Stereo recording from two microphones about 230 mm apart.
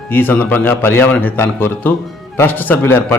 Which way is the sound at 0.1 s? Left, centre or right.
Centre.